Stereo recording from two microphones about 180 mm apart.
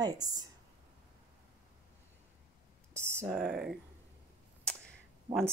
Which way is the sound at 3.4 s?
Centre (ahead or behind).